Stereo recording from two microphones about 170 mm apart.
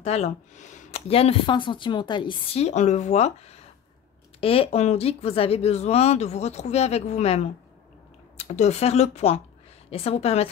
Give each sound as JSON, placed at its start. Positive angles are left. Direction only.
{"t": 0.0, "sound": "speech", "side_deg": 40}